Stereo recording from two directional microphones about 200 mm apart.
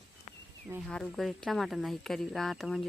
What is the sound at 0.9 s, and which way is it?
Speech, centre (ahead or behind).